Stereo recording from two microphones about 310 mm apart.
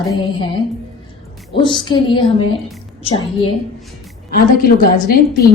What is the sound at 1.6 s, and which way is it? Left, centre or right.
Music, centre.